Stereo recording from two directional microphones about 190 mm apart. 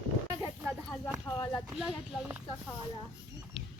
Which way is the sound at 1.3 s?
20° left (ahead or behind).